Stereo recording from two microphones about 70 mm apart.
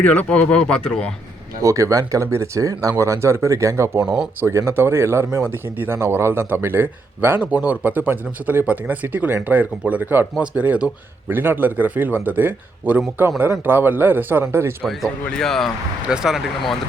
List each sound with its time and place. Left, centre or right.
0.0 s speech: centre
1.6 s speech: right
3.0 s speech: right
4.0 s speech: centre
4.4 s a man's voice: right
15.3 s speech: centre
16.0 s speech: centre